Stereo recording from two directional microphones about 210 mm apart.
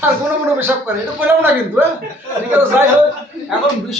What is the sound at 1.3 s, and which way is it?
Speech, 10° right (ahead or behind).